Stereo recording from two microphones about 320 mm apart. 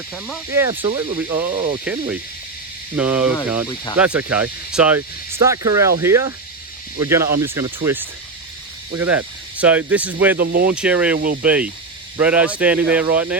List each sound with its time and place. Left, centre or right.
0.1 s speech: centre
0.7 s speech: centre
10.3 s speech: right
10.7 s speech: centre